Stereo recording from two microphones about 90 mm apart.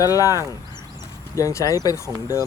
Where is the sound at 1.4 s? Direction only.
35° left (ahead or behind).